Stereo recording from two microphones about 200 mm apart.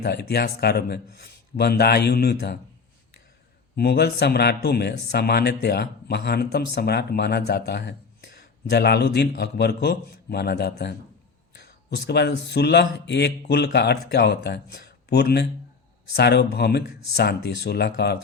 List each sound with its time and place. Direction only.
0.0 s a man's voice: 55° left (ahead or behind)
3.8 s a man's voice: 55° left (ahead or behind)